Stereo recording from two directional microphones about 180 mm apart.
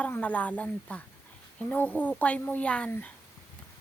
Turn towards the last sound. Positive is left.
turn(degrees=5)  # may be behind; listen again after turning